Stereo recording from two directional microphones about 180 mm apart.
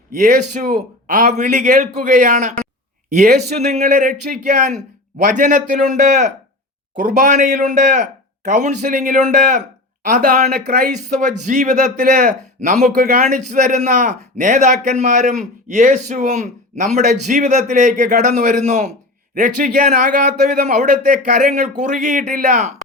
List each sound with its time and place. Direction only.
0.1 s a man's voice: 45° right (ahead or behind)
10.5 s speech: 55° right (ahead or behind)
10.9 s a man's voice: 40° right (ahead or behind)